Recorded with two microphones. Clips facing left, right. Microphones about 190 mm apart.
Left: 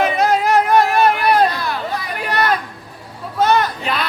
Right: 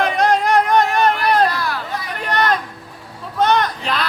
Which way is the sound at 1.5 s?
20° left (ahead or behind).